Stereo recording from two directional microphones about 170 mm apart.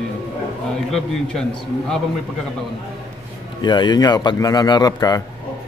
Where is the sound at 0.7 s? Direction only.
5° left (ahead or behind).